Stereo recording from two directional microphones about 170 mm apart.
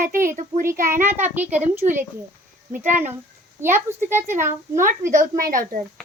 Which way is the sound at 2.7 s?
45° right (ahead or behind).